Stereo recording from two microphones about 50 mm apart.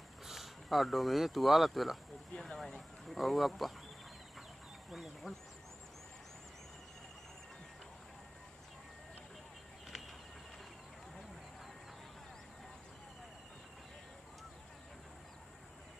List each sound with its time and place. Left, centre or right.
0.3 s speech: centre
2.3 s speech: centre
3.1 s speech: centre
4.9 s speech: centre